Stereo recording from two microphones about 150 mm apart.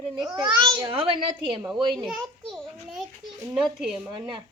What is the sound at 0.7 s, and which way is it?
Speech, 35° right (ahead or behind).